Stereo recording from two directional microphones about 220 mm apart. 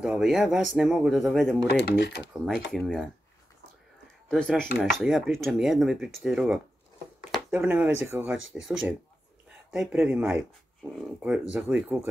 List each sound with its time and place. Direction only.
0.0 s speech: centre (ahead or behind)
1.8 s speech: 50° left (ahead or behind)
2.3 s speech: centre (ahead or behind)
4.3 s speech: 5° left (ahead or behind)
8.4 s speech: 60° right (ahead or behind)
8.6 s speech: centre (ahead or behind)